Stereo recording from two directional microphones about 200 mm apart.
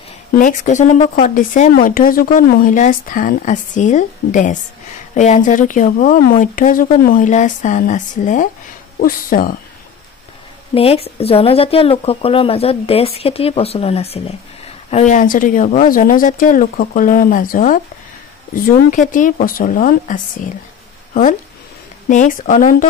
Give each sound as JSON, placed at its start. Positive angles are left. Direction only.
{"t": 0.3, "sound": "speech", "side_deg": 40}
{"t": 10.7, "sound": "speech", "side_deg": 30}